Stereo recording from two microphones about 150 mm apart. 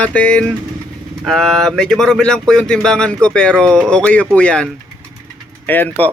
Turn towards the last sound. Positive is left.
turn(degrees=10)  # may be behind; listen again after turning